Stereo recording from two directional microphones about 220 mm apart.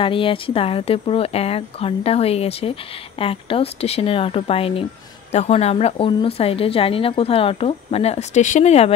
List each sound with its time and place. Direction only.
0.0 s speech: 25° left (ahead or behind)